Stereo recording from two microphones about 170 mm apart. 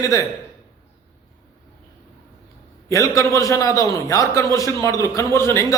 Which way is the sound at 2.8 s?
20° left (ahead or behind).